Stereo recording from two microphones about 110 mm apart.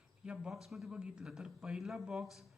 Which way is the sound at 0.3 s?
5° right (ahead or behind).